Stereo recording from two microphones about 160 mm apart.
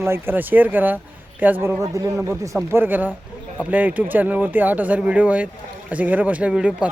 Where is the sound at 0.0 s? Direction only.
15° right (ahead or behind).